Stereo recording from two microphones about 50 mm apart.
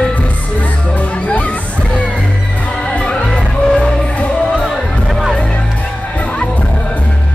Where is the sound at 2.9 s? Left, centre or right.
Centre.